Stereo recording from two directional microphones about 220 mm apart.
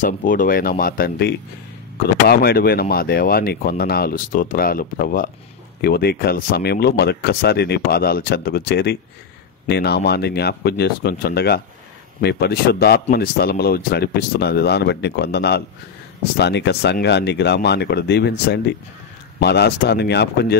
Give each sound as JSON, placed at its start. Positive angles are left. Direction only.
{"t": 0.0, "sound": "speech", "side_deg": 40}